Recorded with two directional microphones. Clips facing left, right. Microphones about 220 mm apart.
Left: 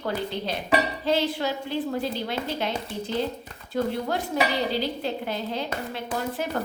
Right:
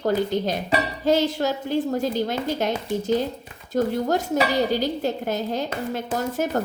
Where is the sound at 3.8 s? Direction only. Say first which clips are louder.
Right 4 dB; 45° right (ahead or behind).